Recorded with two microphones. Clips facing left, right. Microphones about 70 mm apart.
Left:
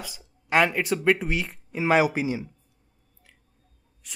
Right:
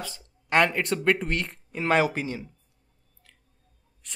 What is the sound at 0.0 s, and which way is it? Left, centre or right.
Speech, centre.